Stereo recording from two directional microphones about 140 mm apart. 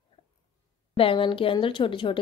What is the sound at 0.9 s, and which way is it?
Speech, 40° left (ahead or behind).